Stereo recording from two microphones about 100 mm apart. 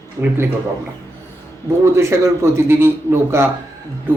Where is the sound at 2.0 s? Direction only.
30° right (ahead or behind).